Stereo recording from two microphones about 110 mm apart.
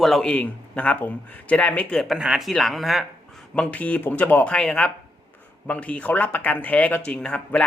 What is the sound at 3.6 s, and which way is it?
A man's voice, 15° left (ahead or behind).